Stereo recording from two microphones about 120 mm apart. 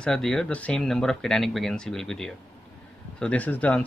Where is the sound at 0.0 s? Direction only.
5° left (ahead or behind).